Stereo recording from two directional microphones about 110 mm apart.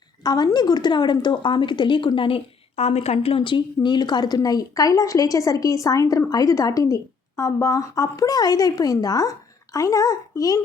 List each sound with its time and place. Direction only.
0.2 s a woman's voice: 35° left (ahead or behind)